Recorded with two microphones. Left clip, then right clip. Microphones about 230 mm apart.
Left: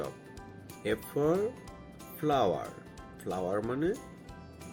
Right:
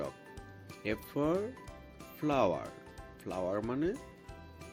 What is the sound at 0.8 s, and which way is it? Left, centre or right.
Speech, right.